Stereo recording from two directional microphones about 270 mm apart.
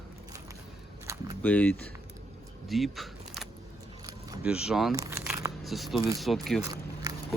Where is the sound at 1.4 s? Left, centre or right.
Centre.